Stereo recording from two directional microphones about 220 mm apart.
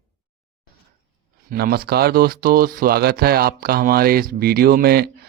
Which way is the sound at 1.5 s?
45° right (ahead or behind).